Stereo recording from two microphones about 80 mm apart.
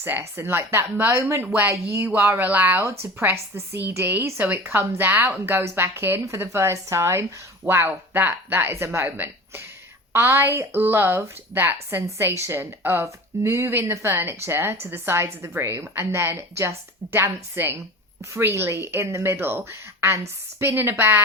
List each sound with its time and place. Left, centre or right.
0.0 s speech: right
1.1 s speech: right
1.4 s a woman's voice: right